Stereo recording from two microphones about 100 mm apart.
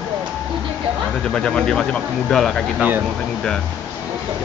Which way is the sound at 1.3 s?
10° left (ahead or behind).